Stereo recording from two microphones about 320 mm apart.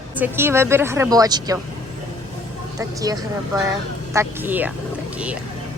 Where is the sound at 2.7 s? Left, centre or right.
Centre.